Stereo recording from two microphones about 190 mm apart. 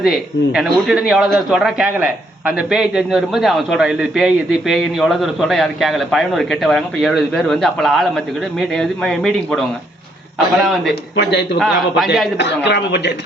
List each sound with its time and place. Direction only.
0.0 s a man's voice: 5° right (ahead or behind)
11.2 s a man's voice: 60° left (ahead or behind)
11.6 s a man's voice: centre (ahead or behind)
12.4 s a man's voice: 65° left (ahead or behind)